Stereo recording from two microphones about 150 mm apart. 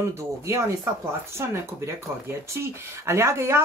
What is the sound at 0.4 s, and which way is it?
Speech, 20° right (ahead or behind).